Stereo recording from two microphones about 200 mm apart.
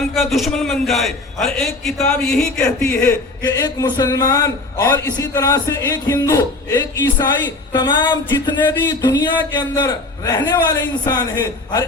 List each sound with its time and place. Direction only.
0.1 s a man's voice: centre (ahead or behind); by 11.2 s 20° left (ahead or behind)